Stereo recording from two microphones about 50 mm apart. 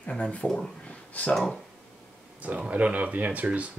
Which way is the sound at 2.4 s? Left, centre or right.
Right.